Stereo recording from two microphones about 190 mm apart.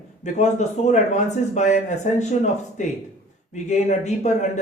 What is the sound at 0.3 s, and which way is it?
Speech, 40° left (ahead or behind).